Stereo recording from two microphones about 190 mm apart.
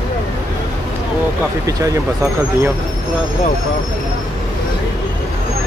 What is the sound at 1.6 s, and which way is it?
Speech, 15° right (ahead or behind).